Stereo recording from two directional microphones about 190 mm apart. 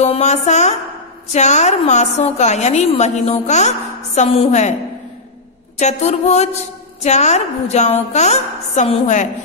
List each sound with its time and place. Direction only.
0.0 s a woman's voice: 35° left (ahead or behind)
5.8 s a woman's voice: 35° left (ahead or behind)